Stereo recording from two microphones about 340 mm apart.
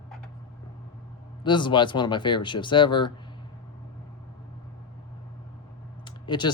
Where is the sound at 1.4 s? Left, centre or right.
Centre.